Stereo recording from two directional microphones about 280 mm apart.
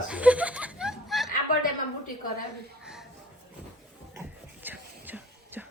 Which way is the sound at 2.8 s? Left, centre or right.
Centre.